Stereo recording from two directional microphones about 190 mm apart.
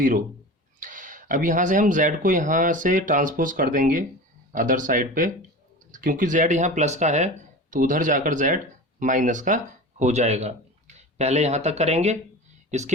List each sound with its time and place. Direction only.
0.8 s speech: 45° right (ahead or behind)